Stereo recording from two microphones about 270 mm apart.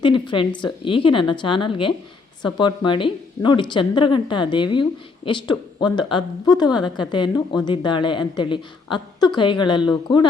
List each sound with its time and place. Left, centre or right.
0.0 s speech: centre